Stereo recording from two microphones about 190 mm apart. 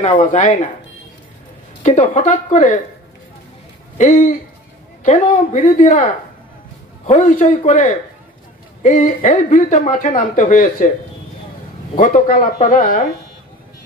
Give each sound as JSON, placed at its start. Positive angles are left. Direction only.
{"t": 0.0, "sound": "speech", "side_deg": 40}
{"t": 1.8, "sound": "speech", "side_deg": 40}
{"t": 4.0, "sound": "speech", "side_deg": 40}
{"t": 7.1, "sound": "speech", "side_deg": 40}
{"t": 12.0, "sound": "speech", "side_deg": 45}